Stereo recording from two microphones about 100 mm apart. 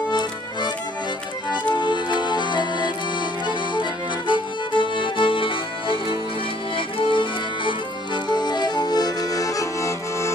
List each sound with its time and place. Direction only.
0.1 s music: 45° left (ahead or behind)
1.8 s music: 50° left (ahead or behind)
4.3 s music: 55° left (ahead or behind)
7.0 s accordion: 55° left (ahead or behind); by 10.3 s 30° left (ahead or behind)